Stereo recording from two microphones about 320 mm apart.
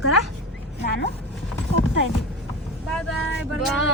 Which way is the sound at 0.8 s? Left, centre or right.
Left.